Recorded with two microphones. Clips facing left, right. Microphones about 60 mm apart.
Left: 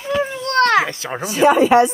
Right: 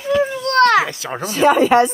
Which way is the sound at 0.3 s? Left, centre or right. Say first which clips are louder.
Right 1 dB; left.